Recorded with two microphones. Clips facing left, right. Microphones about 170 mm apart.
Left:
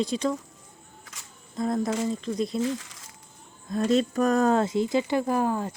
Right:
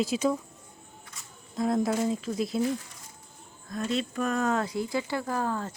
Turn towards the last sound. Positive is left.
turn(degrees=15)  # may be behind; listen again after turning